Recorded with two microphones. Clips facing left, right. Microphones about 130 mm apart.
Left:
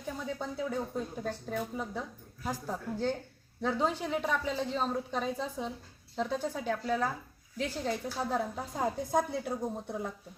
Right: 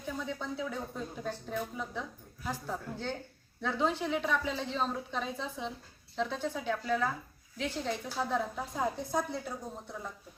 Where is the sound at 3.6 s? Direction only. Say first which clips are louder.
Left 1 dB; 40° left (ahead or behind).